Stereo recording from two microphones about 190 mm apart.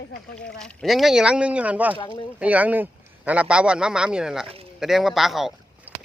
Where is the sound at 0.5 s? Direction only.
Centre (ahead or behind).